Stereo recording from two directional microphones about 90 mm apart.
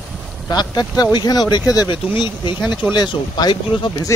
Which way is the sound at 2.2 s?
55° left (ahead or behind).